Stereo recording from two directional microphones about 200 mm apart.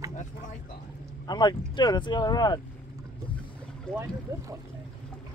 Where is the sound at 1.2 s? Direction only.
20° left (ahead or behind).